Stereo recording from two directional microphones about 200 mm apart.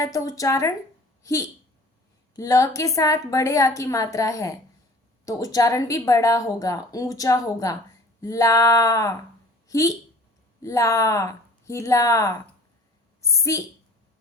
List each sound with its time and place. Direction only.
0.0 s a woman's voice: 15° left (ahead or behind)